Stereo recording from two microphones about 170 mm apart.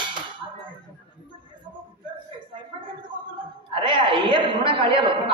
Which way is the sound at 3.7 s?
30° right (ahead or behind).